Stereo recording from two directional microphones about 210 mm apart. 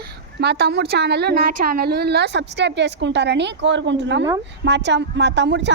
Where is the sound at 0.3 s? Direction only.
50° right (ahead or behind).